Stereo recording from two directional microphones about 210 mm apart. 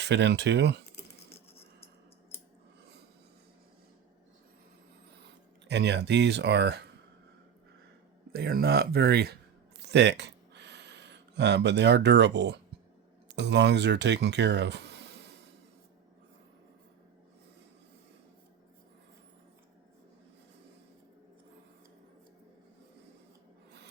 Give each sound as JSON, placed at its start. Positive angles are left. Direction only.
{"t": 0.0, "sound": "speech", "side_deg": -55}
{"t": 5.6, "sound": "speech", "side_deg": -55}
{"t": 8.3, "sound": "speech", "side_deg": -45}
{"t": 9.8, "sound": "a sound", "side_deg": -55}
{"t": 13.3, "sound": "speech", "side_deg": -55}